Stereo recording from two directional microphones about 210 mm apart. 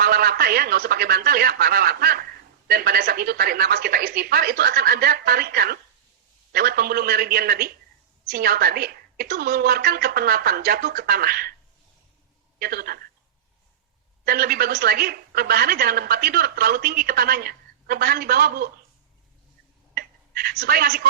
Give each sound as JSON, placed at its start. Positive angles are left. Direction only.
{"t": 0.0, "sound": "a woman's voice", "side_deg": -45}
{"t": 12.5, "sound": "a woman's voice", "side_deg": -45}
{"t": 14.3, "sound": "a woman's voice", "side_deg": -45}
{"t": 19.9, "sound": "speech", "side_deg": -45}